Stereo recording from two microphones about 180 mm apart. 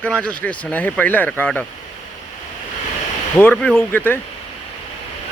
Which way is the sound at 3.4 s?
10° left (ahead or behind).